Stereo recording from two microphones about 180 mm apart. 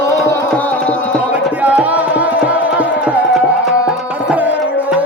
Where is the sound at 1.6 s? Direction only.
10° right (ahead or behind).